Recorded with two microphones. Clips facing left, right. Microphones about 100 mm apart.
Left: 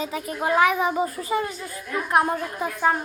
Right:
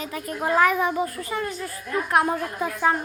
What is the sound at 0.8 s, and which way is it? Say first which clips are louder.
Speech: left 1 dB; 20° left (ahead or behind).